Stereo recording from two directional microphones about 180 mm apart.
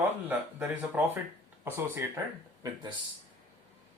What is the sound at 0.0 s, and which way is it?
Speech, 10° right (ahead or behind).